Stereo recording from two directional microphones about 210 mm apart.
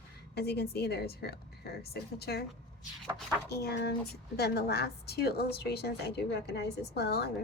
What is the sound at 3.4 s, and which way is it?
A woman's voice, 50° left (ahead or behind).